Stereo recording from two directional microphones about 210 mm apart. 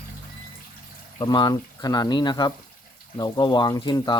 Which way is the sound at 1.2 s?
20° left (ahead or behind).